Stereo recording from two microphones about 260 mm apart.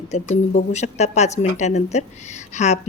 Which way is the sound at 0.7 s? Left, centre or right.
Left.